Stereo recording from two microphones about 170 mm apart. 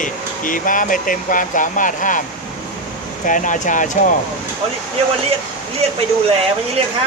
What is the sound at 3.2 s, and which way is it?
Speech, 50° left (ahead or behind).